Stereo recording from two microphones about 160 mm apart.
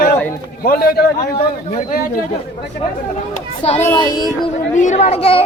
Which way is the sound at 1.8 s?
55° left (ahead or behind).